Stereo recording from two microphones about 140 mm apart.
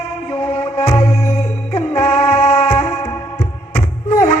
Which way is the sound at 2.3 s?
55° left (ahead or behind).